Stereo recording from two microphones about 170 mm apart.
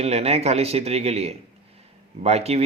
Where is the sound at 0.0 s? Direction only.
40° right (ahead or behind).